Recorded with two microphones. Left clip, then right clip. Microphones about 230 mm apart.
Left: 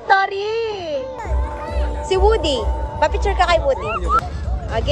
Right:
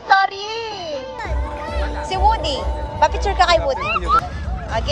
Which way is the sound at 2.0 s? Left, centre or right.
Centre.